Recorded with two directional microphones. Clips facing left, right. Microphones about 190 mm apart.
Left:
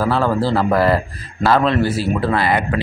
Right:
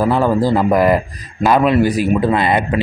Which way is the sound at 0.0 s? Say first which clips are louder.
Right 3 dB; 15° right (ahead or behind).